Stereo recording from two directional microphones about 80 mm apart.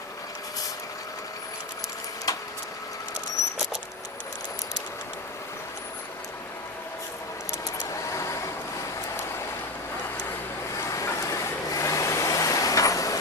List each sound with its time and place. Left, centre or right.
2.3 s vehicle: left
7.9 s vehicle: left
10.8 s vehicle: left